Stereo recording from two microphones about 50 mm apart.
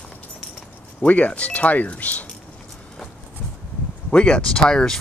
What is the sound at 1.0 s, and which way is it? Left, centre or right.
Speech, left.